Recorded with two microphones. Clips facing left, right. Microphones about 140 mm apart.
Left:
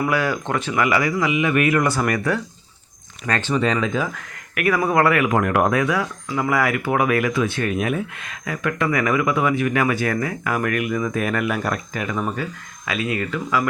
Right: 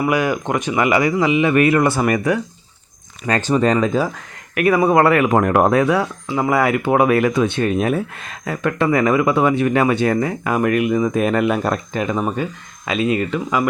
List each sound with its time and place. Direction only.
0.1 s speech: 15° right (ahead or behind)
3.2 s speech: 35° right (ahead or behind)
4.5 s speech: 25° right (ahead or behind)